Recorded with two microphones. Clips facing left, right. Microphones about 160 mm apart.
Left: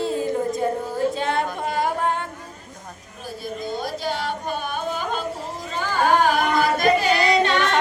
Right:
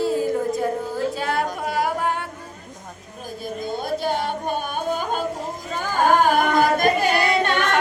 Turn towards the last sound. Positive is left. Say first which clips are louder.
# left 1 dB
turn(degrees=-50)  # may be behind; listen again after turning